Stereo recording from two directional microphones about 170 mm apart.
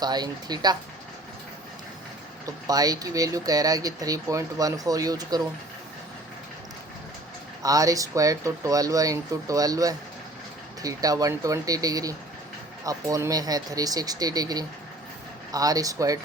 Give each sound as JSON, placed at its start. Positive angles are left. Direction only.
{"t": 0.0, "sound": "speech", "side_deg": -25}
{"t": 2.6, "sound": "speech", "side_deg": -20}
{"t": 7.6, "sound": "speech", "side_deg": -20}